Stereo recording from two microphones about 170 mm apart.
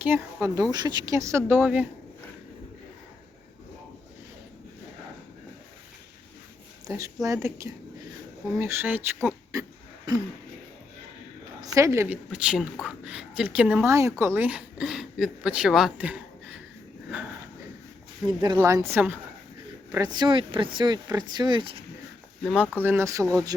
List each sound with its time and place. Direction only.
0.0 s speech: 10° right (ahead or behind)
6.8 s speech: 20° right (ahead or behind)
9.5 s a sound: 20° right (ahead or behind)
11.6 s speech: 20° right (ahead or behind)
18.3 s speech: 25° right (ahead or behind)
22.8 s speech: 15° right (ahead or behind)